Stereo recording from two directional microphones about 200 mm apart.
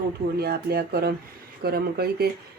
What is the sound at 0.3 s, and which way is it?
Speech, 50° right (ahead or behind).